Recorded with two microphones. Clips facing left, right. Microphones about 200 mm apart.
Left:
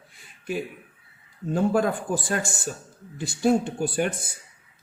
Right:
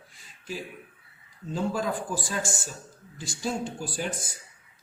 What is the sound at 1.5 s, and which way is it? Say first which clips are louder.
Speech: left 6 dB; 60° left (ahead or behind).